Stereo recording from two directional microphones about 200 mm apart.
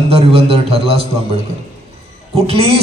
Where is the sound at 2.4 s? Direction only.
30° right (ahead or behind).